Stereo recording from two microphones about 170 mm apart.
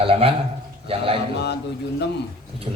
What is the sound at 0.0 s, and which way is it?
A man's voice, 35° right (ahead or behind).